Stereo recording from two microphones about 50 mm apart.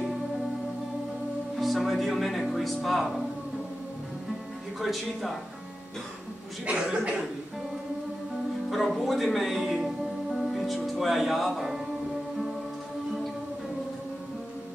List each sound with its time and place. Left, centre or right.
1.6 s speech: centre
4.7 s speech: centre
6.6 s speech: right
8.6 s speech: centre